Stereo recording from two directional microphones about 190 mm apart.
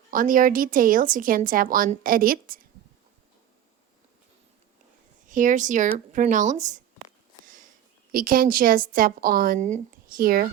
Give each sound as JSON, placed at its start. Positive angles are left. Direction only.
{"t": 0.1, "sound": "a woman's voice", "side_deg": -45}
{"t": 5.3, "sound": "speech", "side_deg": -45}
{"t": 8.1, "sound": "a woman's voice", "side_deg": -50}